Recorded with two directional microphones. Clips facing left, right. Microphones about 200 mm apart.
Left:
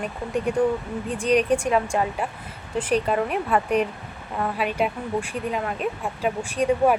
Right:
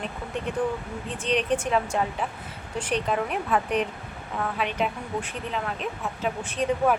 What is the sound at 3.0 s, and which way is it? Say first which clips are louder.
A woman's voice: left 3 dB; 5° left (ahead or behind).